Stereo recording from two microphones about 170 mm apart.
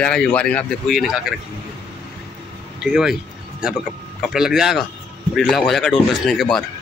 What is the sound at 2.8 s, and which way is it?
A man's voice, 5° right (ahead or behind).